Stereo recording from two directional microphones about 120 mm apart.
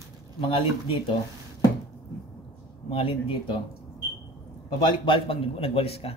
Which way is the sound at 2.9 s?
50° left (ahead or behind).